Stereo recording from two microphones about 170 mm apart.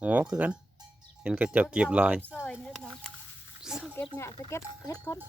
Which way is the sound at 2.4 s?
5° left (ahead or behind).